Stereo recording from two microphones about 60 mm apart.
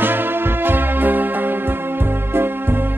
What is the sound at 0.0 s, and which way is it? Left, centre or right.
Music, right.